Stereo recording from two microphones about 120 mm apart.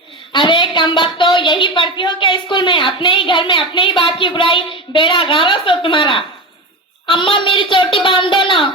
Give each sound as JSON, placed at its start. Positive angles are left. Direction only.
{"t": 0.3, "sound": "a woman's voice", "side_deg": 40}